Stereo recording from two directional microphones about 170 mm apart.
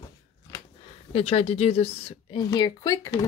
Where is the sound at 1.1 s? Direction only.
35° left (ahead or behind).